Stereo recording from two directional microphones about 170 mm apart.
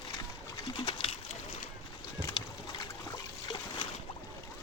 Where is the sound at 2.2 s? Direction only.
20° left (ahead or behind).